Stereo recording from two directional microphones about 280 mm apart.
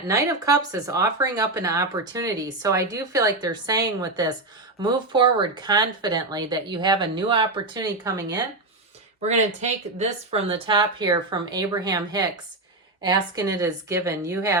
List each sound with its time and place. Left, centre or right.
0.1 s speech: centre
9.2 s speech: right